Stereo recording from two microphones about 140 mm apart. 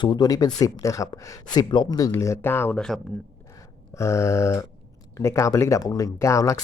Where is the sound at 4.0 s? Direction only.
20° left (ahead or behind).